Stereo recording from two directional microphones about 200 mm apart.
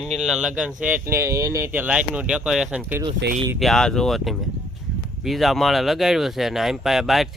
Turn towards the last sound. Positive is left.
turn(degrees=0)  # may be behind; listen again after turning